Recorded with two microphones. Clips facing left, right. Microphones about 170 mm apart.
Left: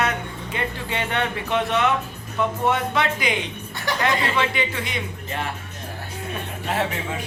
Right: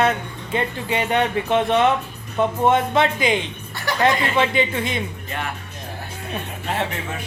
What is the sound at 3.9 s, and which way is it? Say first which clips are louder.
Speech: right 1 dB; 20° left (ahead or behind).